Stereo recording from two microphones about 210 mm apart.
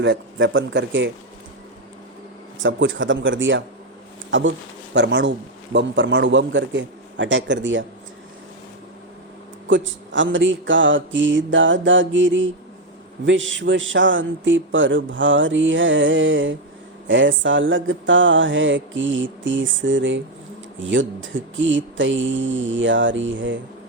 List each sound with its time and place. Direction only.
0.0 s a man's voice: 65° right (ahead or behind)
2.6 s a man's voice: 65° right (ahead or behind)
9.6 s a man's voice: 65° right (ahead or behind)